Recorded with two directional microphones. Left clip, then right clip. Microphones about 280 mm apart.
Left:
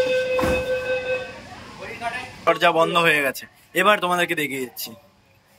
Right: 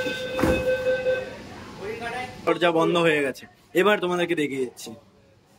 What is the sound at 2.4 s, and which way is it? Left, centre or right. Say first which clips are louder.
A man's voice: left 4 dB; centre.